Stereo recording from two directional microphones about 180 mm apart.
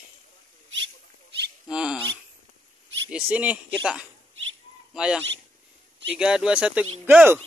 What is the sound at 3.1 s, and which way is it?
Speech, 5° right (ahead or behind).